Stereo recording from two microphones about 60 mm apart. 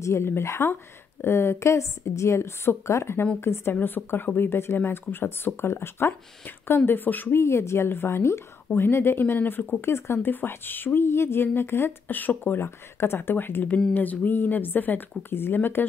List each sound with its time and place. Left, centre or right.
0.0 s a woman's voice: left
7.3 s a woman's voice: left
9.4 s speech: left
9.8 s speech: left
10.3 s a woman's voice: left